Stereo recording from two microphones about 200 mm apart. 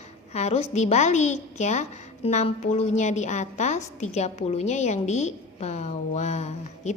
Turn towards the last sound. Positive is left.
turn(degrees=35)  # may be behind; listen again after turning